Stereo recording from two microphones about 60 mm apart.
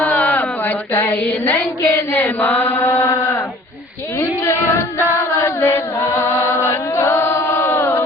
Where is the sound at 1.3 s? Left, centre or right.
Left.